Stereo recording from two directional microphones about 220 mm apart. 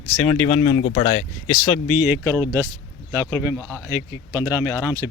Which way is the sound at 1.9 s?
5° right (ahead or behind).